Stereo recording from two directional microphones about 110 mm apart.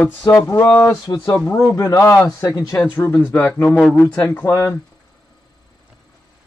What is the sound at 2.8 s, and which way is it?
Speech, 15° left (ahead or behind).